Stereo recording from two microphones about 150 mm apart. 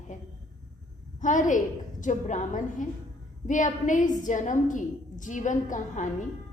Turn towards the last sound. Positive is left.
turn(degrees=55)  # may be behind; listen again after turning